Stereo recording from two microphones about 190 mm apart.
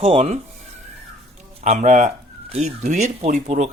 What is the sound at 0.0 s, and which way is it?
Speech, 30° right (ahead or behind).